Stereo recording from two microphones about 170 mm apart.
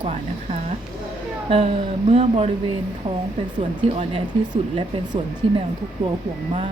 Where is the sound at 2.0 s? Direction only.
35° right (ahead or behind).